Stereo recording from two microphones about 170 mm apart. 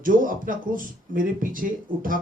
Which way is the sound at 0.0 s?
55° right (ahead or behind).